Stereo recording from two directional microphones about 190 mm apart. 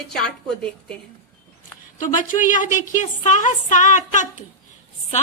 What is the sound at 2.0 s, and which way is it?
A woman's voice, 45° left (ahead or behind).